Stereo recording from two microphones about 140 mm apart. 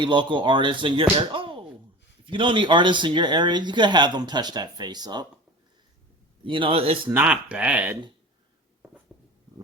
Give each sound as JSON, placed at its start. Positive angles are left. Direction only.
{"t": 0.0, "sound": "speech", "side_deg": -35}
{"t": 6.4, "sound": "speech", "side_deg": -35}
{"t": 7.1, "sound": "speech", "side_deg": -10}